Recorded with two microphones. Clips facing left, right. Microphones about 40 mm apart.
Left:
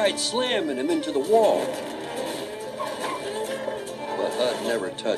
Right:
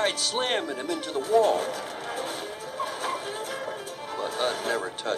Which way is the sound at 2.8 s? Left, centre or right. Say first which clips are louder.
Even; centre.